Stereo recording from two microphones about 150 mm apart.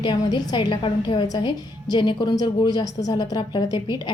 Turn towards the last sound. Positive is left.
turn(degrees=30)  # may be behind; listen again after turning